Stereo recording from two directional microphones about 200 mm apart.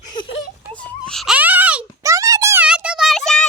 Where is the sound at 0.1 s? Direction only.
25° left (ahead or behind).